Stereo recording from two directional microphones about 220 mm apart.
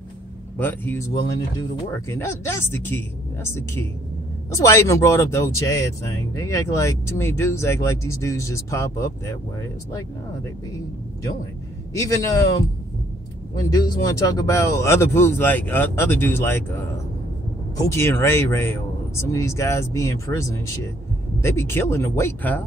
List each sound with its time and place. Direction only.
0.6 s speech: 10° left (ahead or behind)
11.9 s speech: 15° left (ahead or behind)
13.7 s speech: 15° left (ahead or behind)
17.7 s speech: 10° left (ahead or behind)